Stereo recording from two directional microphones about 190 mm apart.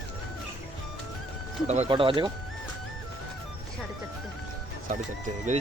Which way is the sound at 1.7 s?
30° right (ahead or behind).